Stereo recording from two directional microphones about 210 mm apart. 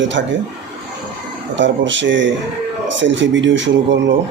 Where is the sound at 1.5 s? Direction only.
60° right (ahead or behind).